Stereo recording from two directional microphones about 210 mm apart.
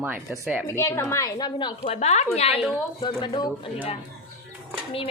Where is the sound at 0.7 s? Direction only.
10° left (ahead or behind).